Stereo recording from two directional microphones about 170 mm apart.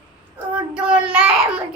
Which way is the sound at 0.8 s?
5° right (ahead or behind).